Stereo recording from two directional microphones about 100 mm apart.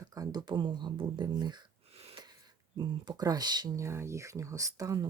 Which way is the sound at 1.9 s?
90° right.